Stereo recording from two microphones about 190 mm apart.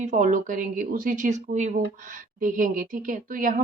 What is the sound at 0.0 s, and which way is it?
Speech, 40° right (ahead or behind).